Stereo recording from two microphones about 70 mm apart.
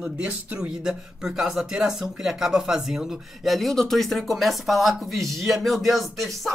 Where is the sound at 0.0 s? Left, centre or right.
Centre.